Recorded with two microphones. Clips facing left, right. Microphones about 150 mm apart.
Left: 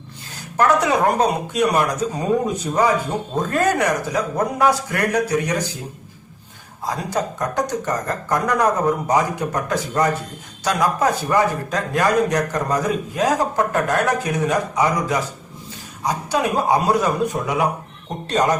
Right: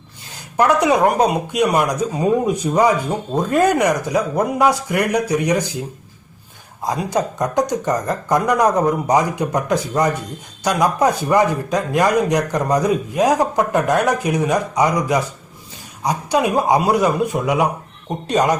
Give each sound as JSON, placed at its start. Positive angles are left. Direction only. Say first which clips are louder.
{"t": 0.5, "sound": "a man's voice", "louder": "right 2 dB", "side_deg": -15}
{"t": 6.8, "sound": "a man's voice", "louder": "right 3 dB", "side_deg": -15}